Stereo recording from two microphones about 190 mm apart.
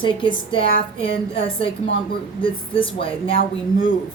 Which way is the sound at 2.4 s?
25° left (ahead or behind).